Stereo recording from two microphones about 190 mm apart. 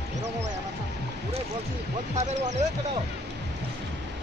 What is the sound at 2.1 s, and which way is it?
Speech, 35° right (ahead or behind).